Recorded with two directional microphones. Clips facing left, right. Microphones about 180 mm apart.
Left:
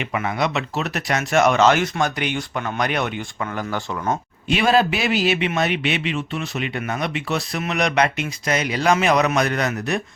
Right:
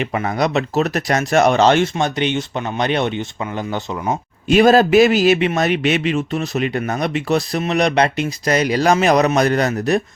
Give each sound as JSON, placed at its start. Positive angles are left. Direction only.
{"t": 0.0, "sound": "speech", "side_deg": -35}
{"t": 4.4, "sound": "a man's voice", "side_deg": -45}